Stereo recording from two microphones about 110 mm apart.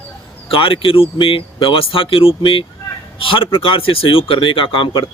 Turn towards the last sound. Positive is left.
turn(degrees=45)  # may be behind; listen again after turning